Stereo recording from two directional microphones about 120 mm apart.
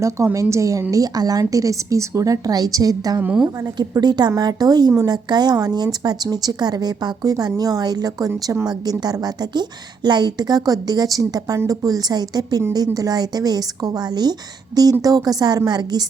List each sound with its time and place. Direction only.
0.4 s a woman's voice: 25° right (ahead or behind)
3.2 s a woman's voice: 10° right (ahead or behind)
3.4 s a woman's voice: 35° right (ahead or behind)